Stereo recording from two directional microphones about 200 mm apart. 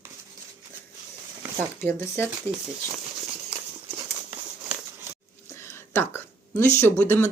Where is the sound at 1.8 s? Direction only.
10° left (ahead or behind).